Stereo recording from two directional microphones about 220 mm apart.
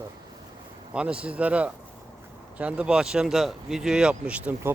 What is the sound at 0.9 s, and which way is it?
Speech, 5° right (ahead or behind).